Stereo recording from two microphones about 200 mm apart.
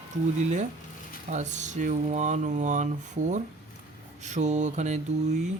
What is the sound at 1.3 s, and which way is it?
Speech, 35° right (ahead or behind).